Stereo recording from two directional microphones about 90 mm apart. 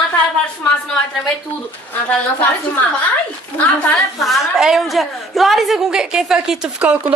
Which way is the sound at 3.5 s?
15° left (ahead or behind).